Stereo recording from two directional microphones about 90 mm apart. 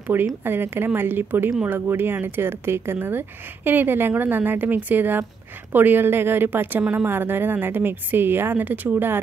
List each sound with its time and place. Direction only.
0.1 s speech: 25° right (ahead or behind)